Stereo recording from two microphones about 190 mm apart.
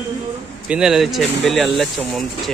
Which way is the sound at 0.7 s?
5° right (ahead or behind).